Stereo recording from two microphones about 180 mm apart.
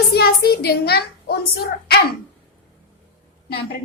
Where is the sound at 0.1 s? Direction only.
60° left (ahead or behind).